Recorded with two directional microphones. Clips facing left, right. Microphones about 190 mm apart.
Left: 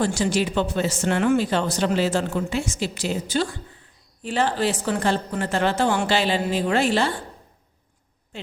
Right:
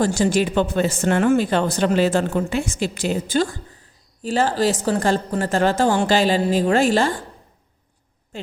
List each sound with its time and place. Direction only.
0.0 s speech: 50° right (ahead or behind)